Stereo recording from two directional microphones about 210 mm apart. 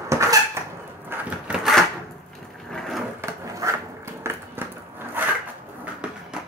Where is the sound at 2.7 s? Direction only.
Centre (ahead or behind).